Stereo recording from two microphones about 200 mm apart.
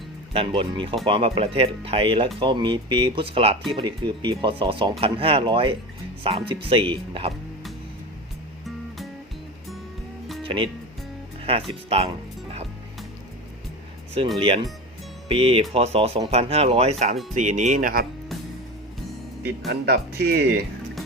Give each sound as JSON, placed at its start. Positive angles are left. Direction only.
{"t": 0.3, "sound": "speech", "side_deg": -25}
{"t": 10.4, "sound": "speech", "side_deg": -25}
{"t": 14.3, "sound": "speech", "side_deg": -25}
{"t": 19.6, "sound": "speech", "side_deg": -55}